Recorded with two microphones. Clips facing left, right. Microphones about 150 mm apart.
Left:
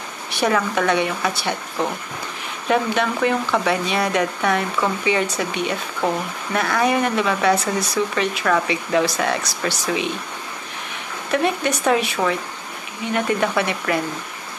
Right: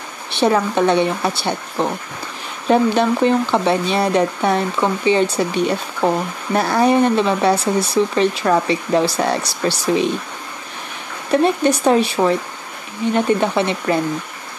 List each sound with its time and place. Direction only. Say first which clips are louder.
0.3 s speech: right 4 dB; 25° right (ahead or behind)
11.3 s speech: right 5 dB; 30° right (ahead or behind)